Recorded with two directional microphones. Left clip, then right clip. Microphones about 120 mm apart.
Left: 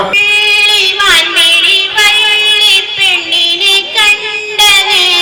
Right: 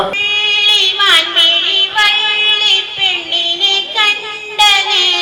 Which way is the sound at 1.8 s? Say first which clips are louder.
Left 4 dB; 15° left (ahead or behind).